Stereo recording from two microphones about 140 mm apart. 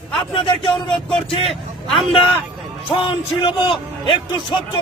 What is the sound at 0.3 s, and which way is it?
Speech, 40° left (ahead or behind).